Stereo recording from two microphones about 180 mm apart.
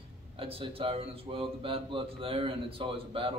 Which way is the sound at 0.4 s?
30° right (ahead or behind).